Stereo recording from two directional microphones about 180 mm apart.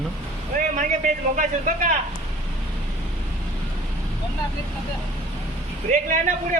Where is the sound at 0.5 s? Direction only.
50° right (ahead or behind).